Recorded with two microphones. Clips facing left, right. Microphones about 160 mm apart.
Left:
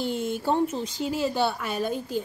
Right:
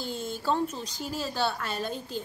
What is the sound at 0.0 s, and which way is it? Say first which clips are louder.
Speech: left 5 dB; 20° left (ahead or behind).